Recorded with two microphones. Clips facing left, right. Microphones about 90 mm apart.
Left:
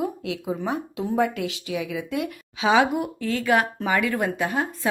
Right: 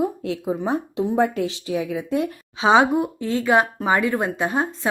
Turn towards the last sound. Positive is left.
turn(degrees=-25)  # may be behind; listen again after turning